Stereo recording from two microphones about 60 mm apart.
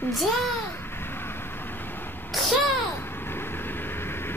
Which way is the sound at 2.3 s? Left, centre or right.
Centre.